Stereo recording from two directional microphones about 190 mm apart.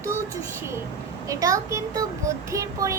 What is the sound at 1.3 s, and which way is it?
A child's voice, 15° right (ahead or behind).